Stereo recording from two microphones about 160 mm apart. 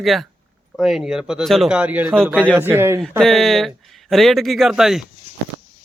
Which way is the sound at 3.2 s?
Centre (ahead or behind).